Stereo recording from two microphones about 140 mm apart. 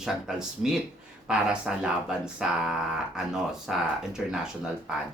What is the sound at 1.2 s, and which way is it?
Speech, 5° right (ahead or behind).